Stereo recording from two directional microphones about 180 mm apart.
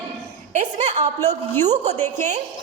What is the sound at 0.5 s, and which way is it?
Speech, 40° right (ahead or behind).